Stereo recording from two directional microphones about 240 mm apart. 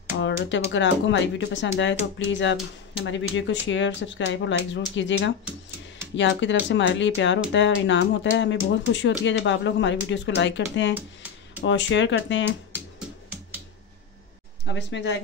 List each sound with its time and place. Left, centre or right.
0.2 s a sound: left
0.7 s speech: left
14.7 s speech: left